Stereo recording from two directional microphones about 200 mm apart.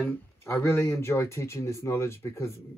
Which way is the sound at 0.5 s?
10° left (ahead or behind).